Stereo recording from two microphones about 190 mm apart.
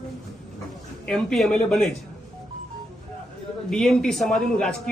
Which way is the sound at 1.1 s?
Centre (ahead or behind).